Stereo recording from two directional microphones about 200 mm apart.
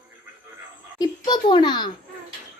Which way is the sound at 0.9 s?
20° left (ahead or behind).